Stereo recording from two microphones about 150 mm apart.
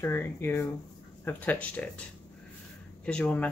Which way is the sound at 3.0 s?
10° left (ahead or behind).